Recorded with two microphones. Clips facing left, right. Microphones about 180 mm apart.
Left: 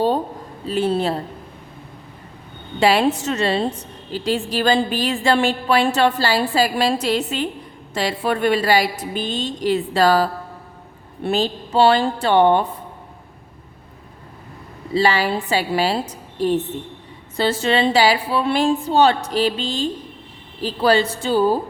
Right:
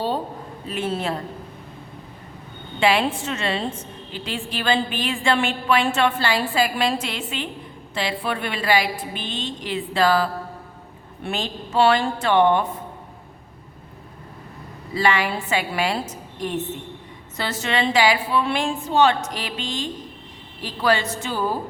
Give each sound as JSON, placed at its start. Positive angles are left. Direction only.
{"t": 0.6, "sound": "a woman's voice", "side_deg": 30}
{"t": 2.8, "sound": "a woman's voice", "side_deg": 40}
{"t": 14.9, "sound": "a woman's voice", "side_deg": 30}